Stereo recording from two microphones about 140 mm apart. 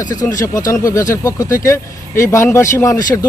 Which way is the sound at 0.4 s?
25° left (ahead or behind).